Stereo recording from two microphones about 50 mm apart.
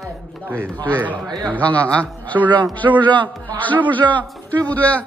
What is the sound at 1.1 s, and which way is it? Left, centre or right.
Speech, left.